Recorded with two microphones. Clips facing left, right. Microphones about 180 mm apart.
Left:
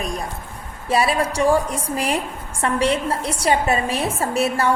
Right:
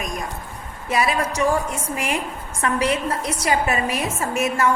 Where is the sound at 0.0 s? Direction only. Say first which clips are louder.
Left 2 dB; 30° left (ahead or behind).